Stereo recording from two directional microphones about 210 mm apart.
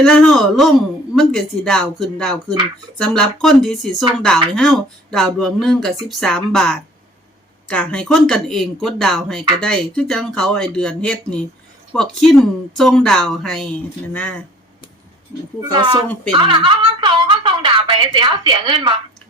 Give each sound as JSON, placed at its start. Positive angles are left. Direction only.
{"t": 0.0, "sound": "a woman's voice", "side_deg": 5}
{"t": 15.7, "sound": "a woman's voice", "side_deg": -20}